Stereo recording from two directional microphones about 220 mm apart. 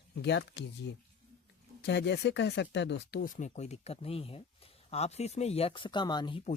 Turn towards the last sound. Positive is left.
turn(degrees=20)  # may be behind; listen again after turning